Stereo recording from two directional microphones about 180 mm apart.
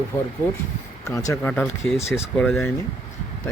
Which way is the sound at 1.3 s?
10° left (ahead or behind).